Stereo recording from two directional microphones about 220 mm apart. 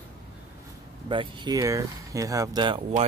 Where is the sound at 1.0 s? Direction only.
20° right (ahead or behind).